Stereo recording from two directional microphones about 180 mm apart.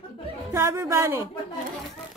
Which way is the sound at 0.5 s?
15° right (ahead or behind).